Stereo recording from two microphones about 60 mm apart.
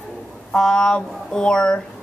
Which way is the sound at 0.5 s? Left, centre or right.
Centre.